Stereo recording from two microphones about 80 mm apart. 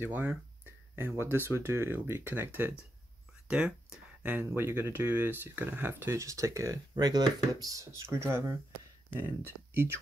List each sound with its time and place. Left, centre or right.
0.0 s speech: right
3.4 s speech: centre
4.2 s speech: right